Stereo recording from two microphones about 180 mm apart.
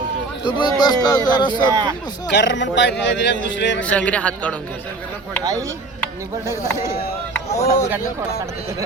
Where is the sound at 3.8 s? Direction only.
5° left (ahead or behind).